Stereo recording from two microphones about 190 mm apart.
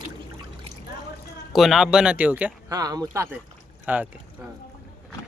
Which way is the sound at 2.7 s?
20° right (ahead or behind).